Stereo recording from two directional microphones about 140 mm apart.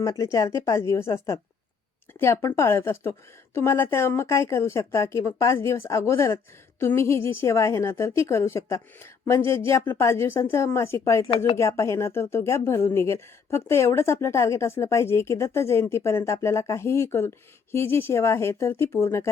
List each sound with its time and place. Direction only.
0.0 s speech: 25° left (ahead or behind)